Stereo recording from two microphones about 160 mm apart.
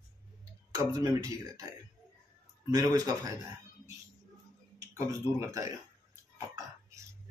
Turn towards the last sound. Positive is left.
turn(degrees=-20)  # may be behind; listen again after turning